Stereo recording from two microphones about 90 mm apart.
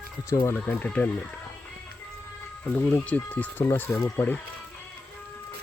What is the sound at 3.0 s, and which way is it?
Speech, 15° left (ahead or behind).